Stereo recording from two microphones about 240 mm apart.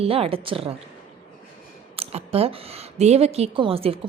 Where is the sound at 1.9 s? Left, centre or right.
Right.